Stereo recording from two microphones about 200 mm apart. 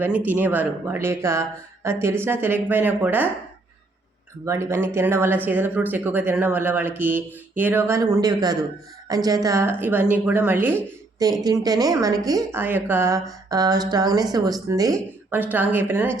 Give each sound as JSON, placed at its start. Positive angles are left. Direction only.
{"t": 0.0, "sound": "a woman's voice", "side_deg": -10}
{"t": 4.4, "sound": "a woman's voice", "side_deg": -15}